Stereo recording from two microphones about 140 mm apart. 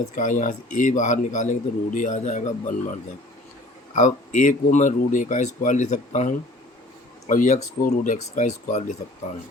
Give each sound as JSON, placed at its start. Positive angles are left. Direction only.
{"t": 0.2, "sound": "a man's voice", "side_deg": 70}
{"t": 3.9, "sound": "a man's voice", "side_deg": 60}